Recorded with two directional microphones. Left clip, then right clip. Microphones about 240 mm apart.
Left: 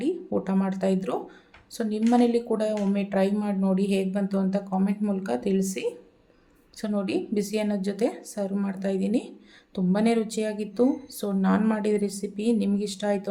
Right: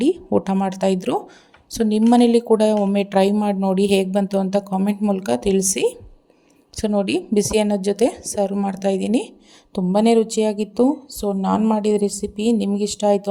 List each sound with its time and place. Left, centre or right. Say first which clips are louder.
0.0 s speech: right 9 dB; right